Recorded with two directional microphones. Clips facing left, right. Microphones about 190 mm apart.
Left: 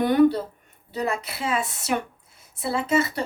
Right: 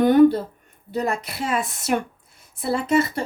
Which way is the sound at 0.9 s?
55° right (ahead or behind).